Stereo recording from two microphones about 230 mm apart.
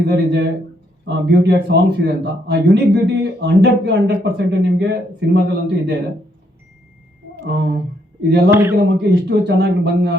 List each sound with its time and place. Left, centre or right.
0.0 s speech: right
7.4 s speech: right
8.4 s a man's voice: centre
8.8 s speech: right